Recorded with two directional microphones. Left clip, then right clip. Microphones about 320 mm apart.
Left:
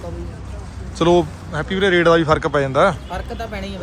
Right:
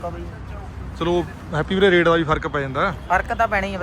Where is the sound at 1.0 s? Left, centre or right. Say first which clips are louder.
Left 7 dB; centre.